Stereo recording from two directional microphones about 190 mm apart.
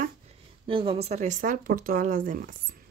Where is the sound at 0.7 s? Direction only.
30° right (ahead or behind); by 2.5 s 45° right (ahead or behind).